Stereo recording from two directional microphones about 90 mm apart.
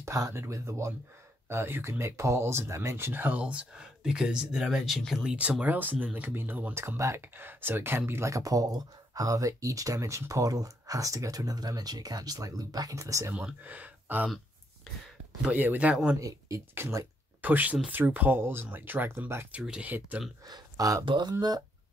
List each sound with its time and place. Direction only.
0.0 s speech: 35° right (ahead or behind); by 5.3 s centre (ahead or behind)
5.3 s speech: 15° right (ahead or behind); by 13.3 s 35° right (ahead or behind)
13.3 s speech: 15° right (ahead or behind)
15.4 s speech: 20° right (ahead or behind)
16.2 s speech: 35° right (ahead or behind)
17.4 s speech: 20° right (ahead or behind)
19.6 s speech: 10° right (ahead or behind)
20.4 s speech: 45° right (ahead or behind)
21.0 s speech: 70° right (ahead or behind)
21.3 s speech: 45° right (ahead or behind)